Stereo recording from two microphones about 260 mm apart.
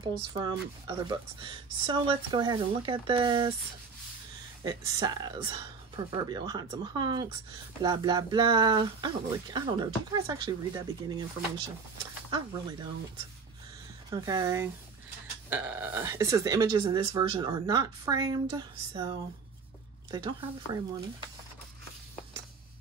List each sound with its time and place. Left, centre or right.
0.0 s speech: centre
4.6 s speech: centre
12.3 s speech: centre
14.1 s speech: centre